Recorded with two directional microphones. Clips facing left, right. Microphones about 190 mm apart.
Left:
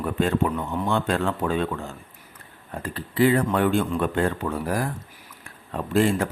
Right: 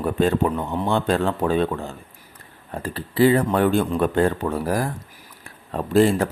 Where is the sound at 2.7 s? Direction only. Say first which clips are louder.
Right 3 dB; 30° right (ahead or behind).